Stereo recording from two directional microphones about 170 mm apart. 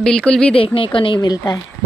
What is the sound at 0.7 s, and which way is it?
Speech, 30° left (ahead or behind).